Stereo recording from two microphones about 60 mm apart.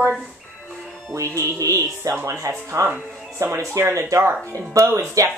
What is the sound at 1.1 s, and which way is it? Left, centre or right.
Speech, right.